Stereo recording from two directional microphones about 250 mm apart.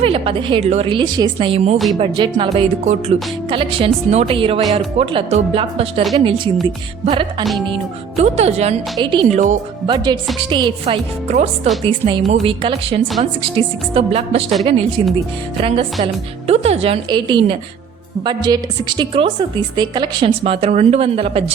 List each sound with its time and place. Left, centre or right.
0.0 s a woman's voice: right
9.9 s a woman's voice: centre